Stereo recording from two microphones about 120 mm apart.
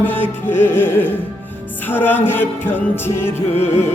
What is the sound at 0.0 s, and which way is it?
Music, 15° left (ahead or behind).